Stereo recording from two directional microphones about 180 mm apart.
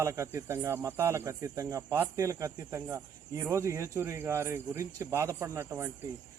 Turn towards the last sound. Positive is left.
turn(degrees=-15)  # may be behind; listen again after turning